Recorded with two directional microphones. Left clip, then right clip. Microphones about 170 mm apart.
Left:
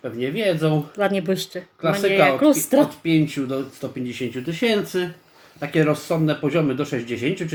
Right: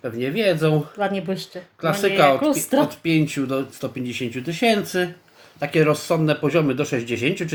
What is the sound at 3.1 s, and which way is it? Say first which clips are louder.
Speech: even; 35° right (ahead or behind).